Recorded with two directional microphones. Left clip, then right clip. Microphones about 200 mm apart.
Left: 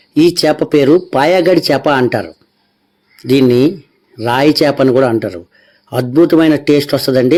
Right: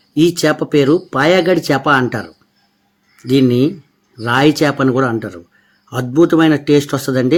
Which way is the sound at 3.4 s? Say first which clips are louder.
Left 4 dB; 25° left (ahead or behind).